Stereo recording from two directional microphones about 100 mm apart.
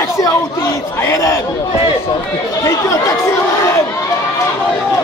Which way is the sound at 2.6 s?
30° left (ahead or behind).